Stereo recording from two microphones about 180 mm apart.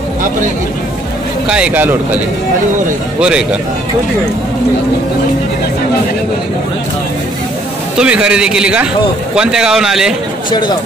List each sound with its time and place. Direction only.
1.5 s speech: 10° right (ahead or behind)
3.2 s a man's voice: 5° right (ahead or behind)
8.0 s a man's voice: 5° right (ahead or behind)